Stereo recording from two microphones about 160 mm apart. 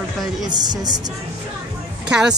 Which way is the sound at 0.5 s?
25° right (ahead or behind).